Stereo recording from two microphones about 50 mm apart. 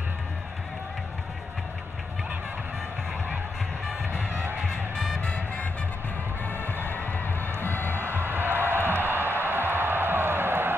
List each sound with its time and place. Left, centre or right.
4.3 s music: right
4.6 s music: centre
6.4 s music: left
8.0 s music: right